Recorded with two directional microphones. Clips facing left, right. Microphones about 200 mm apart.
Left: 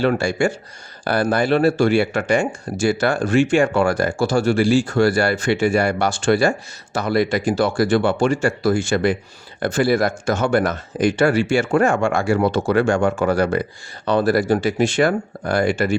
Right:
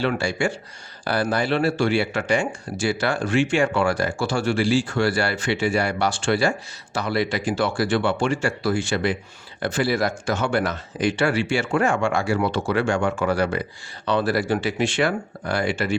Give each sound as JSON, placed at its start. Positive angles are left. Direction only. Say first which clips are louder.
{"t": 0.0, "sound": "speech", "louder": "left 5 dB", "side_deg": 45}